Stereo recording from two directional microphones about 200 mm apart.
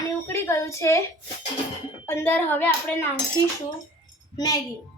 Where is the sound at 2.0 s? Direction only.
10° left (ahead or behind).